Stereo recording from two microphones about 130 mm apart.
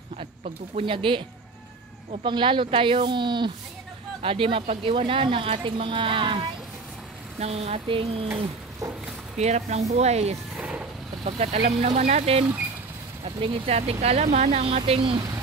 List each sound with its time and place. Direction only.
0.2 s speech: 55° right (ahead or behind)
2.2 s a woman's voice: 40° right (ahead or behind)
7.3 s speech: 55° right (ahead or behind)
9.4 s speech: 60° right (ahead or behind)